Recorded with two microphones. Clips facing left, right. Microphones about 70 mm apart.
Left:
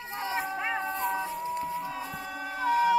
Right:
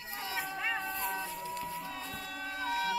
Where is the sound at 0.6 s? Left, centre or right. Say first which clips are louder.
Left 5 dB; centre.